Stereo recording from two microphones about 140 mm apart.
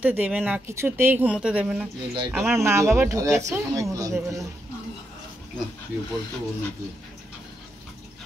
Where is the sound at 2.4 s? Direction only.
20° right (ahead or behind).